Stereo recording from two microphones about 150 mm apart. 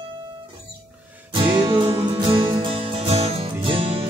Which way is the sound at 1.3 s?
35° right (ahead or behind).